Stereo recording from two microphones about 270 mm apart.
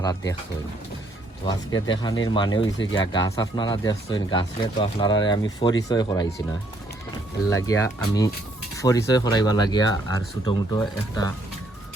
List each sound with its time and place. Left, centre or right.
0.0 s speech: centre
1.5 s speech: centre
7.5 s speech: centre